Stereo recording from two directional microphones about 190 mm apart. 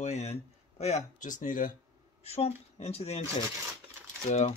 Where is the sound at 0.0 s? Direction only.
35° left (ahead or behind).